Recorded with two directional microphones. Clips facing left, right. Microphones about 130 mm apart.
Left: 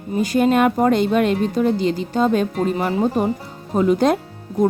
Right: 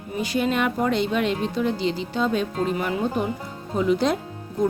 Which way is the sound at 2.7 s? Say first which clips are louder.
Left 5 dB; 35° left (ahead or behind).